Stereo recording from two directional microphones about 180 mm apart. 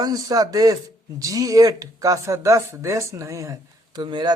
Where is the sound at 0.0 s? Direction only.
20° right (ahead or behind).